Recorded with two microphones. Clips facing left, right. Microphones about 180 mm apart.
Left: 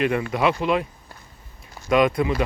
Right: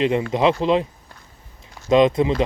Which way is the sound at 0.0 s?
25° right (ahead or behind).